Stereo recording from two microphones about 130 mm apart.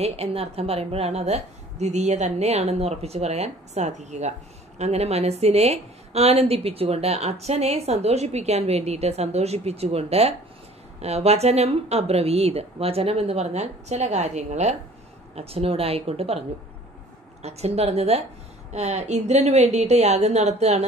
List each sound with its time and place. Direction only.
0.0 s a woman's voice: 50° right (ahead or behind)
15.3 s a woman's voice: 50° right (ahead or behind)